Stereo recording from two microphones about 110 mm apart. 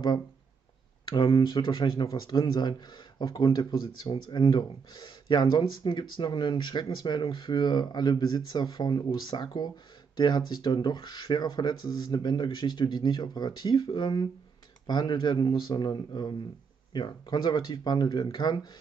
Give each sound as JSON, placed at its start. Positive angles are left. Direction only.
{"t": 1.0, "sound": "speech", "side_deg": 45}